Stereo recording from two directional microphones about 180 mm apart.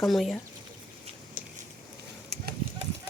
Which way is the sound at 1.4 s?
45° right (ahead or behind).